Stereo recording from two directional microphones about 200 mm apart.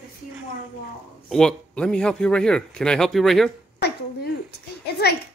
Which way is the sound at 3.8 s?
55° left (ahead or behind).